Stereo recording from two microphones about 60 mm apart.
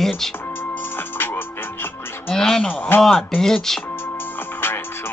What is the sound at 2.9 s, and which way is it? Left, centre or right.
Speech, left.